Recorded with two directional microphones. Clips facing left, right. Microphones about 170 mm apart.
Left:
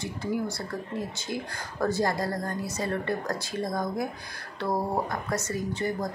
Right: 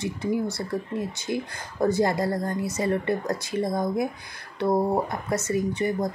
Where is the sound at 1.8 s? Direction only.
20° right (ahead or behind).